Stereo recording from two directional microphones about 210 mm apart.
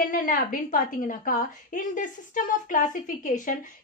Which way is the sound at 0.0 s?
40° left (ahead or behind).